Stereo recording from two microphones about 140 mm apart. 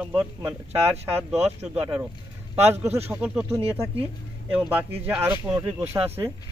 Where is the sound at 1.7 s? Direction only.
10° right (ahead or behind).